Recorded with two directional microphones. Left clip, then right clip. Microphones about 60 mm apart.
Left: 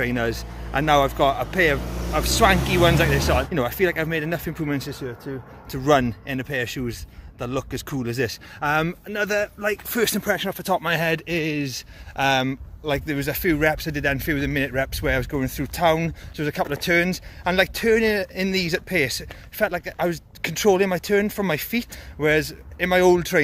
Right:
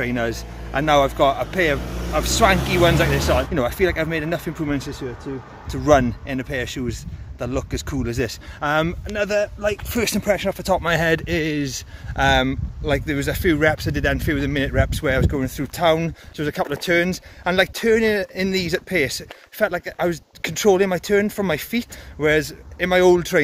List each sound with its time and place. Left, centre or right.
0.0 s a man's voice: centre
1.8 s vehicle: left
2.1 s a man's voice: centre
3.2 s a man's voice: right
8.3 s speech: right
9.9 s a man's voice: centre
10.8 s speech: right
12.2 s speech: right
13.7 s speech: right
14.3 s speech: right
16.3 s speech: right